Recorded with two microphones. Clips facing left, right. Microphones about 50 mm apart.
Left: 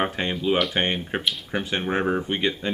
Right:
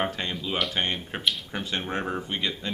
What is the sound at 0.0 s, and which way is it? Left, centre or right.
Speech, left.